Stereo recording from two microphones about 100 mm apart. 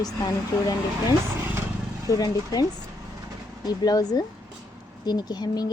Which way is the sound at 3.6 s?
40° left (ahead or behind).